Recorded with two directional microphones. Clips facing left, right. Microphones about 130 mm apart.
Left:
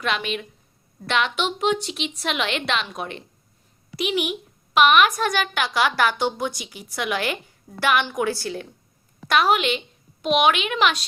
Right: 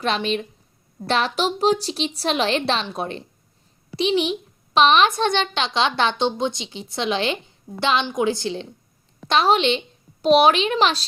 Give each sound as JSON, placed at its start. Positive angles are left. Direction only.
{"t": 0.0, "sound": "a woman's voice", "side_deg": -30}